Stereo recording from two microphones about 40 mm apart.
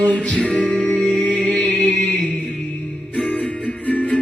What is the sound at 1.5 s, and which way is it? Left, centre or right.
Music, centre.